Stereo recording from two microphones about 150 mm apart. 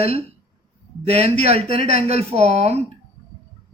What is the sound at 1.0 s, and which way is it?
Speech, 45° right (ahead or behind).